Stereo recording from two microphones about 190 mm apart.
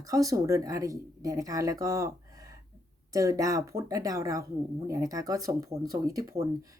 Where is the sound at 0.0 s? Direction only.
20° right (ahead or behind).